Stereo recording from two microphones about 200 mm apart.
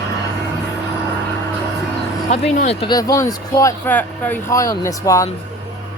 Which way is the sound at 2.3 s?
35° left (ahead or behind).